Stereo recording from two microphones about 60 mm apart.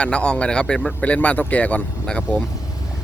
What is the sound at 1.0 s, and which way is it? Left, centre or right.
Speech, left.